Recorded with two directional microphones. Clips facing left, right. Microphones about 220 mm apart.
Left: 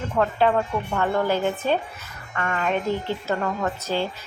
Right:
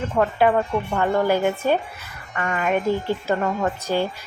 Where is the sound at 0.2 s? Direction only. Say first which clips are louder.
Right 2 dB; 10° right (ahead or behind).